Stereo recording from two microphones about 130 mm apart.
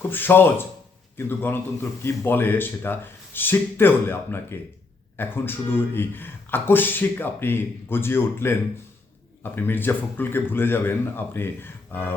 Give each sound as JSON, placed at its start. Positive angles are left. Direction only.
{"t": 0.1, "sound": "speech", "side_deg": 15}